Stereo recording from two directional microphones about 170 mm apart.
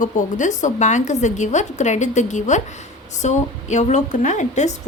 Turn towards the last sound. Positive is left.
turn(degrees=45)  # may be behind; listen again after turning